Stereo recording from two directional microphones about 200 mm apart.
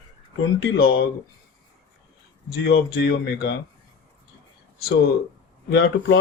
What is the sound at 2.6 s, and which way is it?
Speech, 55° left (ahead or behind).